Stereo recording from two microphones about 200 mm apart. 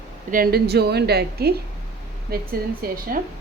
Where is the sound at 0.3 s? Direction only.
45° right (ahead or behind).